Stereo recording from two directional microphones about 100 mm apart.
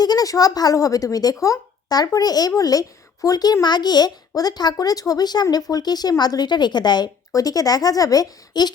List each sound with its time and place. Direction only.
0.0 s speech: 40° left (ahead or behind)